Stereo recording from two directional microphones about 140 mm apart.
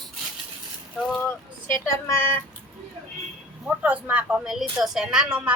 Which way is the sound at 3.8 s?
10° right (ahead or behind).